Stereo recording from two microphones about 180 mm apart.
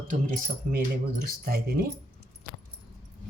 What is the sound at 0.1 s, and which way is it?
Speech, 45° right (ahead or behind).